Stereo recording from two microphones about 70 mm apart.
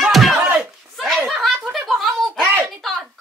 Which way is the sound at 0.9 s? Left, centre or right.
Centre.